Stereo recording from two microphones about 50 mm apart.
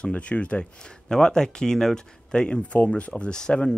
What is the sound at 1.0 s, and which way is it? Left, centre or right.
Speech, centre.